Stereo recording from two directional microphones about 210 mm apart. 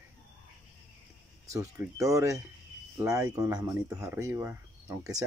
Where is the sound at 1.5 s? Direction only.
15° right (ahead or behind).